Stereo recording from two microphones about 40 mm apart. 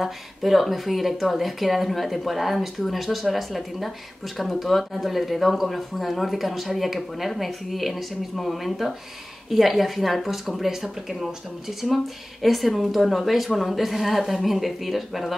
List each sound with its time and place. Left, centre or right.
0.0 s speech: centre